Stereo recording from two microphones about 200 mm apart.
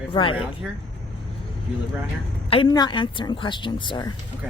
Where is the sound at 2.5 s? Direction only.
25° left (ahead or behind).